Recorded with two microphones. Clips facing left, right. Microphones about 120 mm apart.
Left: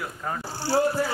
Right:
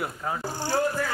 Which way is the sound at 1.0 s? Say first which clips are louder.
Left 3 dB; 20° left (ahead or behind).